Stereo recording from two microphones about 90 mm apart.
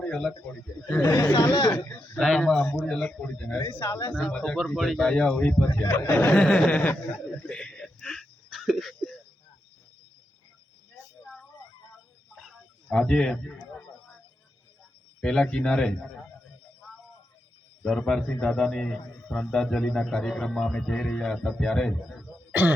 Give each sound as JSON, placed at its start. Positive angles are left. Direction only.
{"t": 0.0, "sound": "speech", "side_deg": 10}
{"t": 1.0, "sound": "speech", "side_deg": 25}
{"t": 2.0, "sound": "speech", "side_deg": 5}
{"t": 3.8, "sound": "speech", "side_deg": 30}
{"t": 4.1, "sound": "speech", "side_deg": 15}
{"t": 4.5, "sound": "speech", "side_deg": 0}
{"t": 5.8, "sound": "speech", "side_deg": 30}
{"t": 6.3, "sound": "speech", "side_deg": 5}
{"t": 7.4, "sound": "a sound", "side_deg": 10}
{"t": 12.4, "sound": "a sound", "side_deg": 5}
{"t": 15.2, "sound": "speech", "side_deg": 10}
{"t": 17.8, "sound": "a man's voice", "side_deg": 5}